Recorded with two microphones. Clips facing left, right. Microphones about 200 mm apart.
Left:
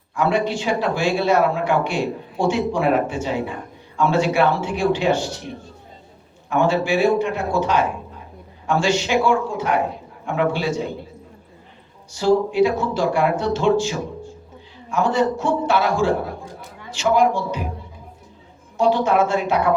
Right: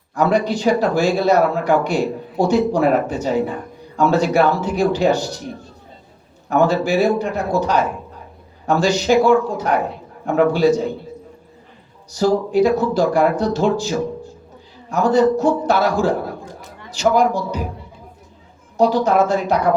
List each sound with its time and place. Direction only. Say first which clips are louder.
0.1 s speech: right 3 dB; 40° right (ahead or behind)
6.5 s speech: right 3 dB; 40° right (ahead or behind)
12.1 s speech: right 1 dB; 40° right (ahead or behind)
18.8 s speech: right 2 dB; 40° right (ahead or behind)